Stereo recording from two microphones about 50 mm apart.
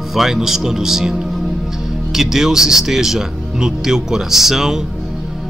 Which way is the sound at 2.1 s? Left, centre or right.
Centre.